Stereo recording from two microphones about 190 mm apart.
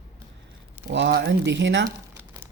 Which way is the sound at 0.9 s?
65° right (ahead or behind).